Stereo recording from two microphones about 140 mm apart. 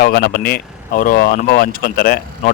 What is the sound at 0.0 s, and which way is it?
Speech, 90° left.